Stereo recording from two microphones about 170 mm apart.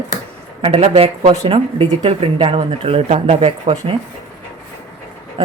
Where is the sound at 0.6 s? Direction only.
35° right (ahead or behind).